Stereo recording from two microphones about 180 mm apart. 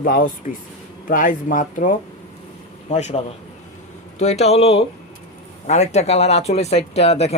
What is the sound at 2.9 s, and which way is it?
Speech, 40° left (ahead or behind).